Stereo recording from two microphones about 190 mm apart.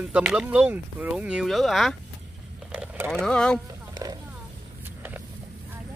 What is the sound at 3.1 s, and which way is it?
Speech, 5° left (ahead or behind).